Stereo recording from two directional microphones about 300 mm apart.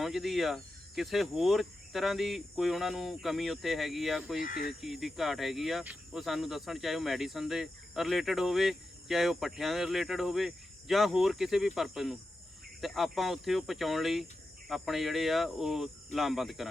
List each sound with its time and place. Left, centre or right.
0.0 s speech: centre
4.4 s speech: left
4.8 s speech: centre